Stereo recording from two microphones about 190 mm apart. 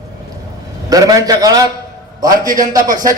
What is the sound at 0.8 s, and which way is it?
A man's voice, 20° right (ahead or behind).